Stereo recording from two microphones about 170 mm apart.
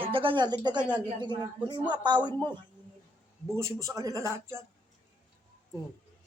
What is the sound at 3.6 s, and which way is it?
Speech, 20° right (ahead or behind).